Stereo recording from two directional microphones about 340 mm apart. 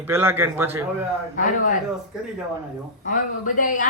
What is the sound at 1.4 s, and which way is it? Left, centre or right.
Speech, left.